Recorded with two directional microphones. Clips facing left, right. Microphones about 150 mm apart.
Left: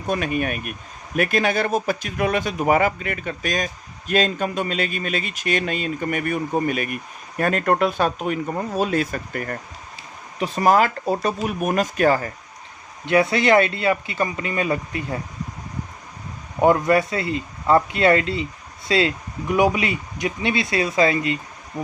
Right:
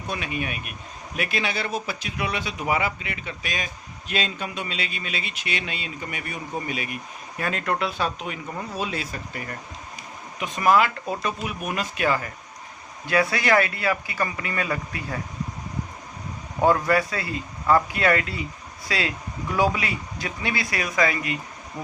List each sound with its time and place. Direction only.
0.1 s speech: 50° left (ahead or behind)
10.4 s speech: 35° left (ahead or behind)
13.1 s speech: 25° left (ahead or behind)
16.6 s speech: 20° left (ahead or behind)